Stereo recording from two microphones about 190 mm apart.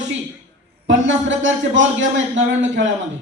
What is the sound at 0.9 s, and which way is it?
A man's voice, 80° right.